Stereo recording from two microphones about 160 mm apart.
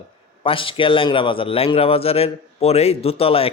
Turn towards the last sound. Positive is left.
turn(degrees=35)  # may be behind; listen again after turning